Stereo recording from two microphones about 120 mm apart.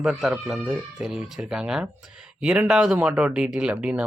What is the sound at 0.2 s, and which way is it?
Speech, 5° right (ahead or behind).